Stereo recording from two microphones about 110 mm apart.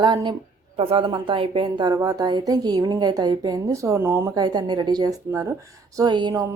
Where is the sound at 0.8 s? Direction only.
55° right (ahead or behind); by 4.3 s 25° right (ahead or behind).